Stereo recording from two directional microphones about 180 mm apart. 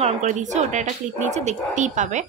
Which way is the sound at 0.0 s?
40° right (ahead or behind).